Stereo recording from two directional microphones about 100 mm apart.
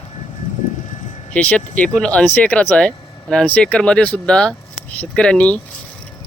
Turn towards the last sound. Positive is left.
turn(degrees=10)  # may be behind; listen again after turning